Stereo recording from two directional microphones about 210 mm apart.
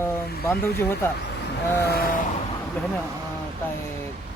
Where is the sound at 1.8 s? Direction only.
50° left (ahead or behind).